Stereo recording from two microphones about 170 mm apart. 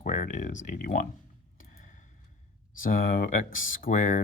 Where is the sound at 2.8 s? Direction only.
55° left (ahead or behind).